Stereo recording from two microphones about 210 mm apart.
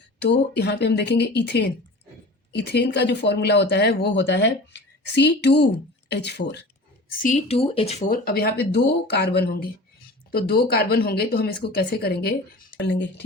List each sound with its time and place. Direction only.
0.2 s speech: 50° left (ahead or behind)
7.2 s speech: 35° left (ahead or behind); by 13.2 s 55° left (ahead or behind)